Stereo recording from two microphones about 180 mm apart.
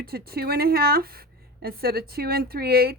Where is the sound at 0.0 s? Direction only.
60° right (ahead or behind).